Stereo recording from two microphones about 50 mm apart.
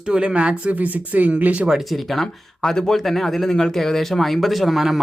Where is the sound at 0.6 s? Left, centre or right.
Right.